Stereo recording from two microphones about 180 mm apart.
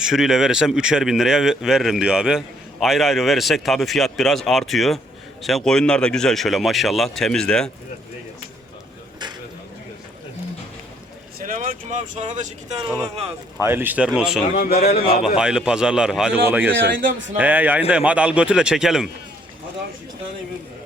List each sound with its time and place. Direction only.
0.0 s speech: 5° right (ahead or behind)
11.4 s speech: 50° right (ahead or behind)
13.6 s a man's voice: 10° right (ahead or behind)
14.5 s speech: 55° left (ahead or behind)
15.4 s a man's voice: 5° right (ahead or behind)